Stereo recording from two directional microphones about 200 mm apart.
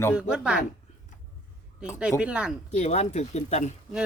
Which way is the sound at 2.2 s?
5° right (ahead or behind).